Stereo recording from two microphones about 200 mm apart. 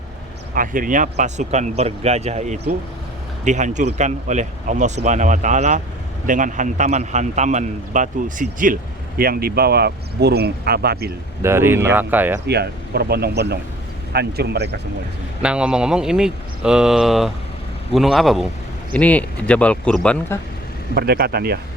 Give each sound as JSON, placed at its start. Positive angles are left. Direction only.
{"t": 0.5, "sound": "a man's voice", "side_deg": -45}
{"t": 11.4, "sound": "speech", "side_deg": -10}
{"t": 12.5, "sound": "speech", "side_deg": -55}
{"t": 15.4, "sound": "speech", "side_deg": -5}
{"t": 20.9, "sound": "speech", "side_deg": -50}